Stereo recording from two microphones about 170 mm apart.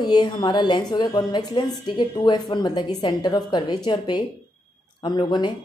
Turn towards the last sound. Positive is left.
turn(degrees=25)  # may be behind; listen again after turning